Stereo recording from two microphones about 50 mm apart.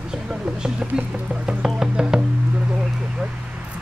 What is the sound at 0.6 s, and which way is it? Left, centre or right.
Speech, centre.